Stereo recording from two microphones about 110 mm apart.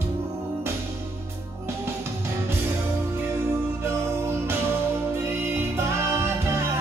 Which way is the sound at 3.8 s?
25° right (ahead or behind).